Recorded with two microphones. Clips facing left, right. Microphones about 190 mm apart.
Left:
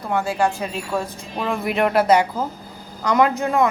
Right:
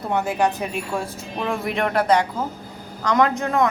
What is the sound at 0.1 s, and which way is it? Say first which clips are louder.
Speech: left 1 dB; 20° right (ahead or behind).